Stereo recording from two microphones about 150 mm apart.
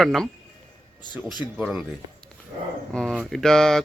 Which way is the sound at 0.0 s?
Centre (ahead or behind).